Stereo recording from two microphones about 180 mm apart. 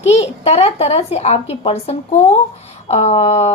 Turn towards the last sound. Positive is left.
turn(degrees=35)  # may be behind; listen again after turning